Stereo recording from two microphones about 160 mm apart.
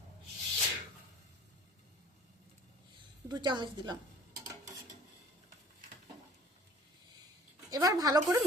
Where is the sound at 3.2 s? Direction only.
25° right (ahead or behind).